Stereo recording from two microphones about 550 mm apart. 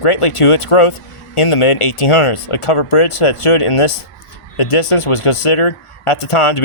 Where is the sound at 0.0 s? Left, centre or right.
Left.